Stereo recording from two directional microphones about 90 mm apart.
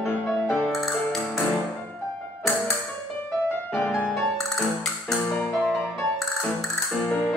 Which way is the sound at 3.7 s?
30° left (ahead or behind).